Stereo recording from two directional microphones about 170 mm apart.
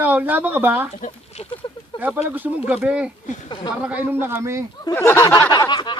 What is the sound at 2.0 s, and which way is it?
Speech, 10° right (ahead or behind).